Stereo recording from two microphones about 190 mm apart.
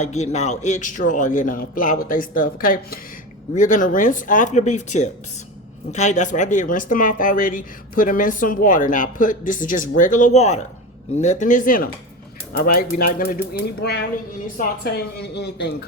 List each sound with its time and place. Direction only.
0.0 s a man's voice: 35° left (ahead or behind); by 15.7 s 65° left (ahead or behind)